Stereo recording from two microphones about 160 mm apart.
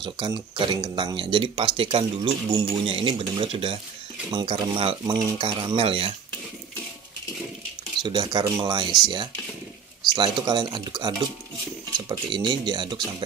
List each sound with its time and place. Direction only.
0.0 s speech: 30° right (ahead or behind)
8.0 s speech: 30° right (ahead or behind)
10.1 s speech: 30° right (ahead or behind)